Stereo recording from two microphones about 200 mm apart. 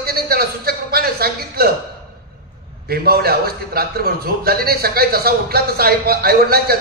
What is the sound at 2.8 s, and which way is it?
A man's voice, 50° right (ahead or behind).